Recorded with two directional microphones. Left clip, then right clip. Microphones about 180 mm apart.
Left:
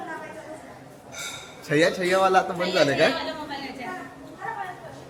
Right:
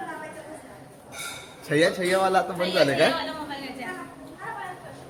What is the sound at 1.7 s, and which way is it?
Speech, 10° left (ahead or behind).